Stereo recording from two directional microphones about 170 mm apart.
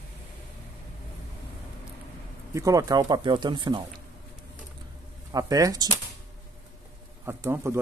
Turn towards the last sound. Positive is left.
turn(degrees=-15)  # may be behind; listen again after turning